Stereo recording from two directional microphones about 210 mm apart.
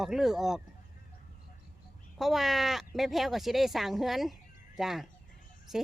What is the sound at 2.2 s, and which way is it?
A woman's voice, centre (ahead or behind).